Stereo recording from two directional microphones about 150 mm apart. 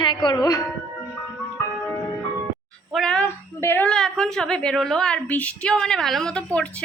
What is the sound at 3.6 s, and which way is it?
A woman's voice, 15° left (ahead or behind).